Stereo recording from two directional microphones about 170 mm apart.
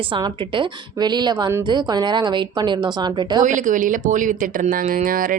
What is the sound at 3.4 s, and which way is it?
Speech, 50° right (ahead or behind).